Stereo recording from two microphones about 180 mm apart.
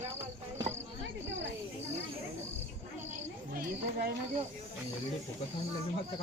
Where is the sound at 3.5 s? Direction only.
55° right (ahead or behind).